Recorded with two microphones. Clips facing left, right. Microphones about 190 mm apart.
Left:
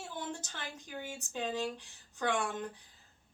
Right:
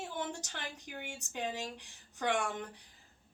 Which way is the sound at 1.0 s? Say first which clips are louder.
Left 1 dB; 15° right (ahead or behind).